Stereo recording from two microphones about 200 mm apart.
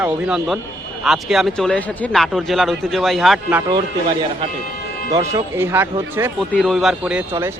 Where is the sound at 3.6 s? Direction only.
15° right (ahead or behind).